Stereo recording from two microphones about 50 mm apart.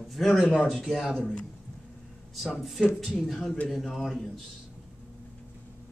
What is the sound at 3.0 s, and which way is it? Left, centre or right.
Speech, centre.